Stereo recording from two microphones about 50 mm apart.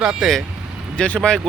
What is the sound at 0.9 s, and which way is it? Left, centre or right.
Speech, left.